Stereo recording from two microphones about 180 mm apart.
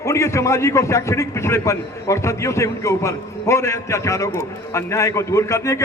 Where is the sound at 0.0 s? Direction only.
15° left (ahead or behind).